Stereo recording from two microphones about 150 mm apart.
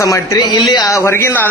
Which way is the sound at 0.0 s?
20° left (ahead or behind).